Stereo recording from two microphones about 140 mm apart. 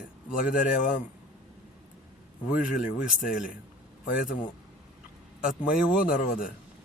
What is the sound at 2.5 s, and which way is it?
Speech, 75° left (ahead or behind).